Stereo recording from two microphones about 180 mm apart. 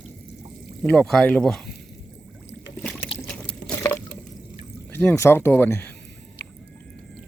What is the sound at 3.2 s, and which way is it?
Liquid, 5° left (ahead or behind).